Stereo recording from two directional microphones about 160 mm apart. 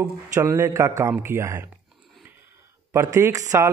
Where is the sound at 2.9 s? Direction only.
20° right (ahead or behind).